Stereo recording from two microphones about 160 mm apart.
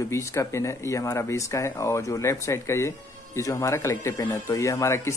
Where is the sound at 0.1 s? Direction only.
15° left (ahead or behind).